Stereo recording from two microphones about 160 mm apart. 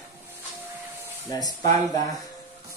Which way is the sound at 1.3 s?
25° left (ahead or behind).